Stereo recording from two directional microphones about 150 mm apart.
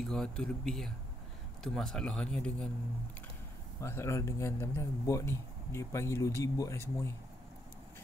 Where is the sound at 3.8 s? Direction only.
20° left (ahead or behind).